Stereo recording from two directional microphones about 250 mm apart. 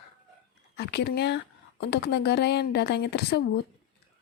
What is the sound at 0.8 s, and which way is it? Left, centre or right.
Speech, left.